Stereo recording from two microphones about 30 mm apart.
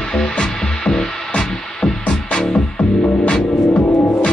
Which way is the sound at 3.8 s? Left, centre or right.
Centre.